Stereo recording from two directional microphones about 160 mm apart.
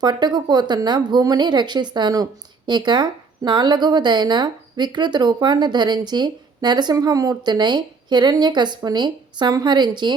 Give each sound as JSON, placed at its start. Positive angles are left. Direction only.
{"t": 0.0, "sound": "speech", "side_deg": -25}